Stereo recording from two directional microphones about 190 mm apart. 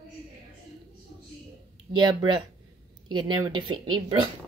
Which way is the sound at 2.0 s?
25° right (ahead or behind).